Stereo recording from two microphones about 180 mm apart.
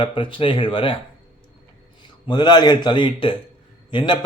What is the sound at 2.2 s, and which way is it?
Speech, 25° left (ahead or behind).